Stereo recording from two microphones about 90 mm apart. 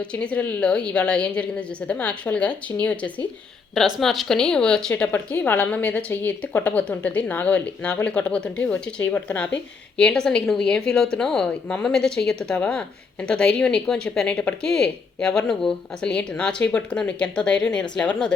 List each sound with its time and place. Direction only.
0.0 s speech: 10° left (ahead or behind)
3.8 s speech: 5° right (ahead or behind)
5.1 s speech: 20° left (ahead or behind)